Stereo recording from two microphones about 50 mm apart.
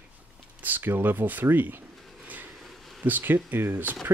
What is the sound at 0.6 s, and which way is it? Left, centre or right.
Speech, right.